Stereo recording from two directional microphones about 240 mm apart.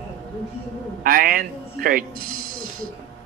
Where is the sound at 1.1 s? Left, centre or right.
Right.